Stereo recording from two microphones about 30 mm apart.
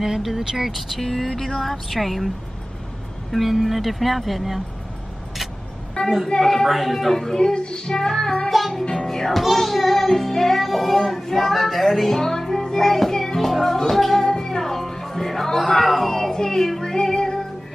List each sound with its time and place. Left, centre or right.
0.2 s music: centre
1.0 s a sound: centre
1.6 s music: centre
6.0 s child singing: left
6.4 s a sound: centre
6.7 s music: centre
7.2 s child singing: centre
8.5 s music: centre
8.9 s music: centre
9.3 s music: centre
14.3 s music: left; by 16.1 s centre
16.1 s a child's voice: centre
16.8 s music: centre